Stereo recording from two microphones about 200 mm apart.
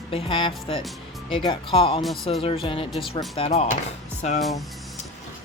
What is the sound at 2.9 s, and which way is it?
Speech, centre (ahead or behind).